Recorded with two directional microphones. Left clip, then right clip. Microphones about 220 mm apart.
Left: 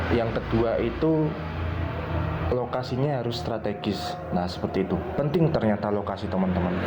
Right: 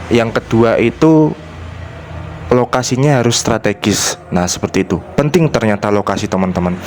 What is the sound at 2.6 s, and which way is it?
Speech, 55° right (ahead or behind).